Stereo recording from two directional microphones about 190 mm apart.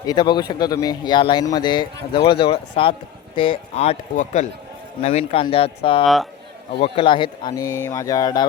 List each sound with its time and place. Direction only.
0.0 s speech: 20° left (ahead or behind)